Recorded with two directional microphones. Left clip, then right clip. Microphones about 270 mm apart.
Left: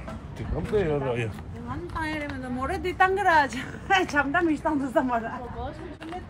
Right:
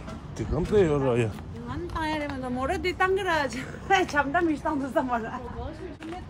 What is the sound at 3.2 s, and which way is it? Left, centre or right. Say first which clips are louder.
A woman's voice: left 6 dB; centre.